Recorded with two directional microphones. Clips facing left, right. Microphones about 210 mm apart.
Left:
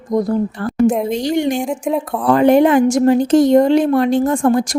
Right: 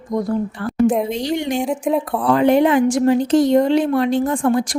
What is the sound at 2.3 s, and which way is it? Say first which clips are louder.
Speech: left 3 dB; 45° left (ahead or behind).